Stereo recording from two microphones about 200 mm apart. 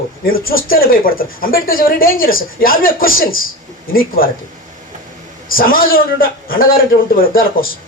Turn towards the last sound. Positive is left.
turn(degrees=45)  # may be behind; listen again after turning